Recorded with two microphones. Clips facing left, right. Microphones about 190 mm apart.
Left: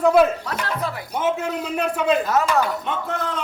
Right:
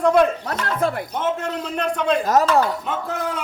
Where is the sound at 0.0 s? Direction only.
5° left (ahead or behind).